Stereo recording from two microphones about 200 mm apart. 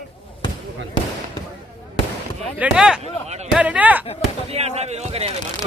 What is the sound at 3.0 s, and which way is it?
Speech, 35° right (ahead or behind).